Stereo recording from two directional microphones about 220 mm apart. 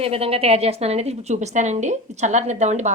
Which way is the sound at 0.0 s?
25° right (ahead or behind).